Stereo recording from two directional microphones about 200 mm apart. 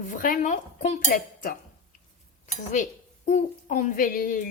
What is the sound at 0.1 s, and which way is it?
Speech, 45° left (ahead or behind).